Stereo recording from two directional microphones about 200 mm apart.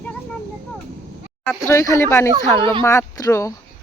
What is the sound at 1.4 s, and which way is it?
Speech, 15° left (ahead or behind).